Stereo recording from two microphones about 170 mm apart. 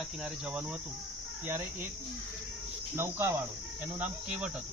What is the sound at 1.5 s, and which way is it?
Cricket, 15° right (ahead or behind).